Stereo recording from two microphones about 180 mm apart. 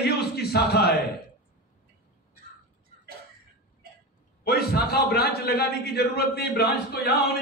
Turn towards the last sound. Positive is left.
turn(degrees=60)  # may be behind; listen again after turning